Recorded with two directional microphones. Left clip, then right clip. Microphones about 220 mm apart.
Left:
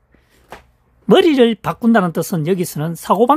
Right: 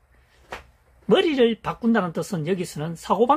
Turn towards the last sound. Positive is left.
turn(degrees=50)  # may be behind; listen again after turning